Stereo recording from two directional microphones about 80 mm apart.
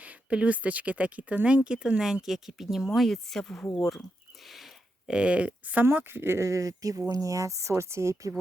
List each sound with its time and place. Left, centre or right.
0.0 s speech: centre
4.4 s a sound: centre
5.1 s speech: centre; by 8.3 s right